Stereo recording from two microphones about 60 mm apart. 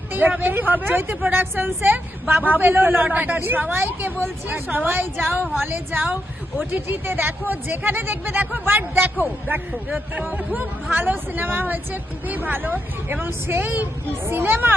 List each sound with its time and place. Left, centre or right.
0.1 s a woman's voice: right
10.2 s speech: right
10.9 s a woman's voice: right